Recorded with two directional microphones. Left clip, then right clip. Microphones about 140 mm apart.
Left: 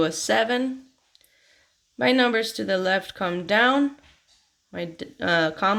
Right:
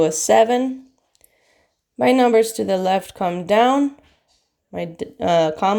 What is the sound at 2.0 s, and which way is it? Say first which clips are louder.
Speech: right 6 dB; 25° right (ahead or behind).